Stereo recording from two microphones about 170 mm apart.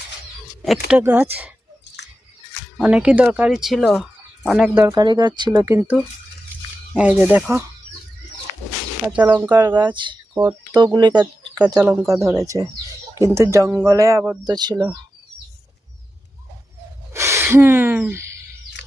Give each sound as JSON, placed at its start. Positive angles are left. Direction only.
{"t": 0.9, "sound": "speech", "side_deg": -10}
{"t": 2.7, "sound": "speech", "side_deg": -5}
{"t": 4.9, "sound": "speech", "side_deg": -25}
{"t": 9.0, "sound": "speech", "side_deg": -10}
{"t": 9.5, "sound": "speech", "side_deg": -25}
{"t": 17.1, "sound": "gasp", "side_deg": -15}